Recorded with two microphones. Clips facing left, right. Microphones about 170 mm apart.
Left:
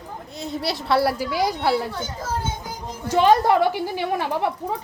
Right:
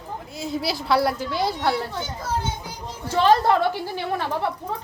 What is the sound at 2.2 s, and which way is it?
Children playing, 50° left (ahead or behind).